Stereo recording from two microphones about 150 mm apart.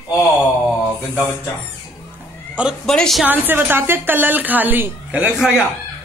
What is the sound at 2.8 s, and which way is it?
Speech, 5° left (ahead or behind).